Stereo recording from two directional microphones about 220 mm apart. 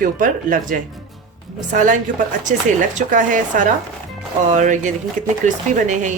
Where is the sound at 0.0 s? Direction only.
40° right (ahead or behind).